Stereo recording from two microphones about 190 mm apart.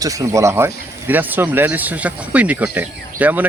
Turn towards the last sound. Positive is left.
turn(degrees=-10)  # may be behind; listen again after turning